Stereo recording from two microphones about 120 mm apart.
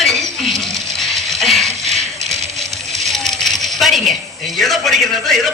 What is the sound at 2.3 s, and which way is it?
Coin, 70° right (ahead or behind).